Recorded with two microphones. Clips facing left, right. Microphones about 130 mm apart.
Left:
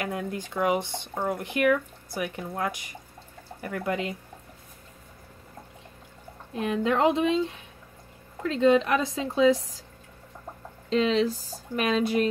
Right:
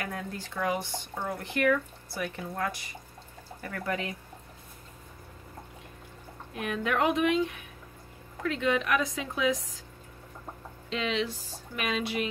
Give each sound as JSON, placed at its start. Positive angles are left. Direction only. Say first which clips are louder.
{"t": 0.0, "sound": "speech", "louder": "left 5 dB", "side_deg": 20}
{"t": 6.5, "sound": "speech", "louder": "left 5 dB", "side_deg": 30}
{"t": 10.9, "sound": "speech", "louder": "left 8 dB", "side_deg": 40}